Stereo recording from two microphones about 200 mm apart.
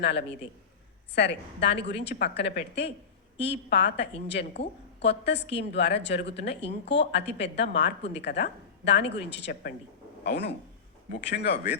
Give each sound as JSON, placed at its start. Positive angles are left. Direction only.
{"t": 0.0, "sound": "a woman's voice", "side_deg": 60}